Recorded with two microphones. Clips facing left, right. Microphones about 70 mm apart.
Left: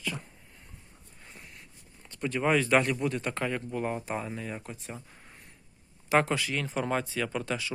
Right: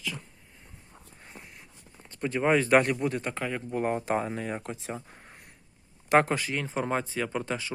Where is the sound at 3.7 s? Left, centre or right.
Right.